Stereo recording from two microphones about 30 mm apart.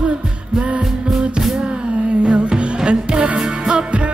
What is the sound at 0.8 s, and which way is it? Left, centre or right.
Music, centre.